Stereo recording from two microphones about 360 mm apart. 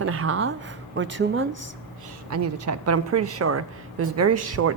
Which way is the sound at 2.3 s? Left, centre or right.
Right.